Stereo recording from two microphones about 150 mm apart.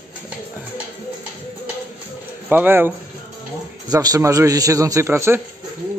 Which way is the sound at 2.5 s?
15° right (ahead or behind).